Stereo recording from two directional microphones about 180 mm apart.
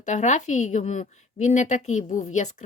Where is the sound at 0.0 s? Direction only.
40° left (ahead or behind).